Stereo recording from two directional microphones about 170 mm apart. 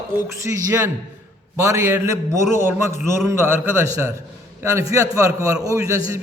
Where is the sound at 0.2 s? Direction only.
15° right (ahead or behind).